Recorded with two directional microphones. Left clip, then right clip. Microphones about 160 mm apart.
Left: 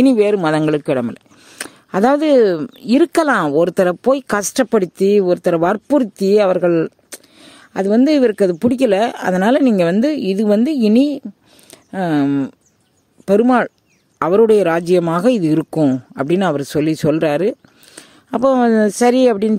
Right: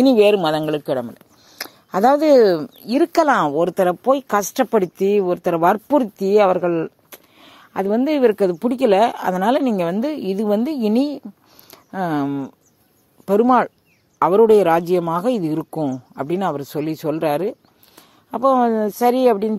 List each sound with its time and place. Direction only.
0.2 s speech: 50° left (ahead or behind)
1.7 s speech: 45° left (ahead or behind); by 19.5 s 70° left (ahead or behind)